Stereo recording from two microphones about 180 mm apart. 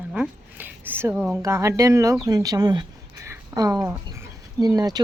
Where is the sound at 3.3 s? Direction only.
20° right (ahead or behind).